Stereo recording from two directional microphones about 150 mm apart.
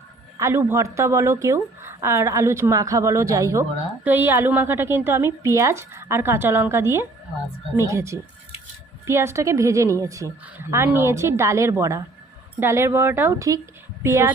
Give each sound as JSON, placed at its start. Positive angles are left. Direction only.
{"t": 0.3, "sound": "a woman's voice", "side_deg": -20}